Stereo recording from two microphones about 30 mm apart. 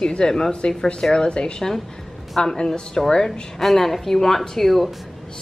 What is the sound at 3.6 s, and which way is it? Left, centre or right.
Speech, centre.